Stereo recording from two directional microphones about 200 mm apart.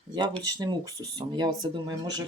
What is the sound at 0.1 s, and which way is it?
Speech, 20° right (ahead or behind).